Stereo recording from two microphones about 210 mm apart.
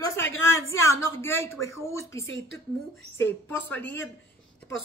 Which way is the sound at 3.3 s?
10° left (ahead or behind).